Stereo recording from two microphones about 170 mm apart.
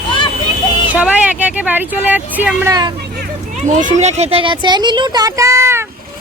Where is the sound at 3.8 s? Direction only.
40° right (ahead or behind); by 5.8 s 15° right (ahead or behind).